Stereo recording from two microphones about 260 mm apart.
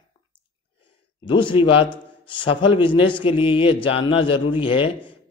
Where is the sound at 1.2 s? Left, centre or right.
Centre.